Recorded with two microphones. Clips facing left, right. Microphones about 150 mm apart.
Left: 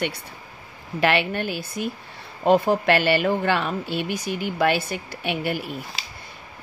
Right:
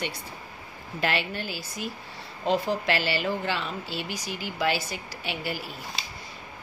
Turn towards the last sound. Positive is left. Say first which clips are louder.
# left 7 dB
turn(degrees=60)  # may be behind; listen again after turning